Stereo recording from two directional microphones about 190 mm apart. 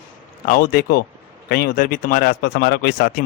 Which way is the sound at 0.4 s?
50° left (ahead or behind).